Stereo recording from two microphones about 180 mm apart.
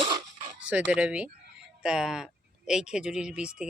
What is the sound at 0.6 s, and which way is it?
Speech, 5° right (ahead or behind).